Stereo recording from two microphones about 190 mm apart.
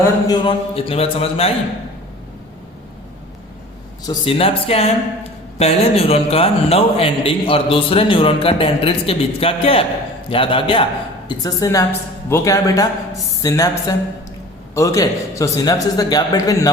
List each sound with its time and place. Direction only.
0.3 s a man's voice: 30° left (ahead or behind)
4.0 s a man's voice: 25° left (ahead or behind)